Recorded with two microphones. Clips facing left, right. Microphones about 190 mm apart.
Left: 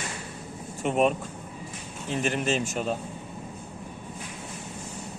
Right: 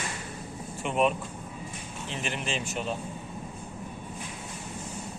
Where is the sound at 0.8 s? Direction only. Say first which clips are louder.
Left 3 dB; 45° left (ahead or behind).